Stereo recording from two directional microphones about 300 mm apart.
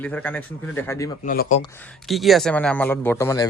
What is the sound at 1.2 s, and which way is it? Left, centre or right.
Speech, left.